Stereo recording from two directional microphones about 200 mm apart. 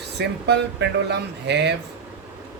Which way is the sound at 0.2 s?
60° right (ahead or behind).